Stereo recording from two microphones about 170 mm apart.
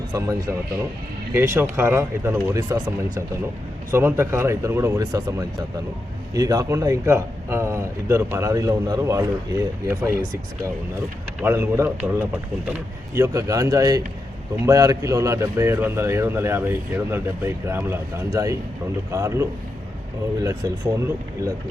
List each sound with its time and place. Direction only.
0.1 s speech: 20° right (ahead or behind)
11.3 s speech: 10° right (ahead or behind)